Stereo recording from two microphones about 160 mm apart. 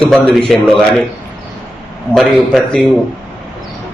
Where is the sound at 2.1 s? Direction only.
5° left (ahead or behind).